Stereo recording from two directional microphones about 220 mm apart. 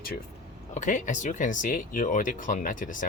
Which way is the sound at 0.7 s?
35° left (ahead or behind).